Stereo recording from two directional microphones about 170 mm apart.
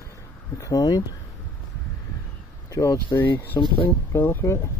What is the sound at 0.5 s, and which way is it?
Speech, 20° left (ahead or behind).